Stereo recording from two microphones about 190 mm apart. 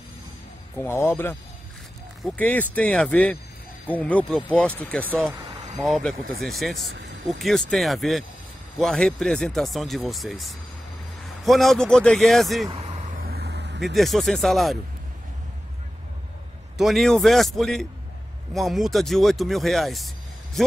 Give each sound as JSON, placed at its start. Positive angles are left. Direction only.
{"t": 0.7, "sound": "speech", "side_deg": 15}
{"t": 12.7, "sound": "vehicle", "side_deg": -30}
{"t": 13.2, "sound": "vehicle", "side_deg": -55}
{"t": 13.9, "sound": "speech", "side_deg": 0}
{"t": 16.7, "sound": "speech", "side_deg": 0}